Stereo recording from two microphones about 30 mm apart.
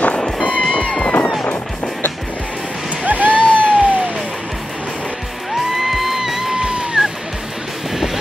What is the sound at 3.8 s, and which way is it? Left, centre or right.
Music, right.